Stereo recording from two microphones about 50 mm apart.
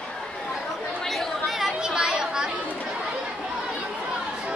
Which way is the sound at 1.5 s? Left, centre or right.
Centre.